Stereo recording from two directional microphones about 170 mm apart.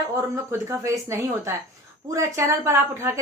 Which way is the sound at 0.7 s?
15° right (ahead or behind).